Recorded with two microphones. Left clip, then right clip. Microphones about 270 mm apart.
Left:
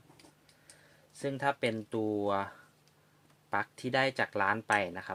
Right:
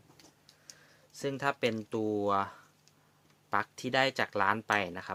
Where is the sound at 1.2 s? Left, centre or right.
Centre.